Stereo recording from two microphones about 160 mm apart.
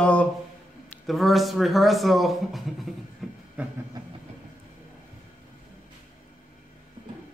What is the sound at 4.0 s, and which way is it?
Vehicle, 25° right (ahead or behind).